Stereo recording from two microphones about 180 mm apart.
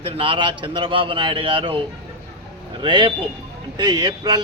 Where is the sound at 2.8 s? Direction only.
25° right (ahead or behind).